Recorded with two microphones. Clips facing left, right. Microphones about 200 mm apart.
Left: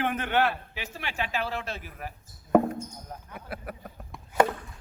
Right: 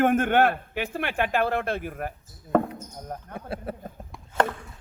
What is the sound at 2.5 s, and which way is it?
Basketball bounce, 10° left (ahead or behind).